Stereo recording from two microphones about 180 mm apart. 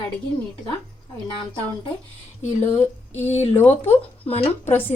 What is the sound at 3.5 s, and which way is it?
Speech, 10° left (ahead or behind).